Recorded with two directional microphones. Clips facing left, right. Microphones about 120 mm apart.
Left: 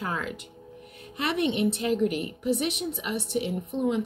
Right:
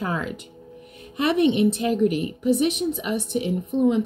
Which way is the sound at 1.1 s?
20° right (ahead or behind).